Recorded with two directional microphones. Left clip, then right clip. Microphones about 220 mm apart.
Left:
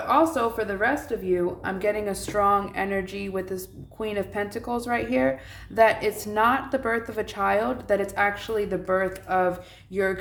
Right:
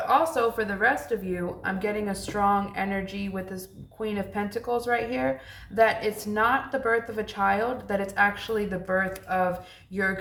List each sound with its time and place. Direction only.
0.1 s speech: 25° left (ahead or behind)